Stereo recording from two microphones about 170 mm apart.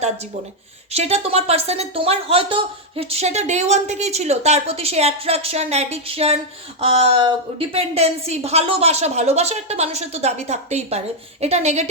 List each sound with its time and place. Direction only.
0.9 s speech: 35° right (ahead or behind)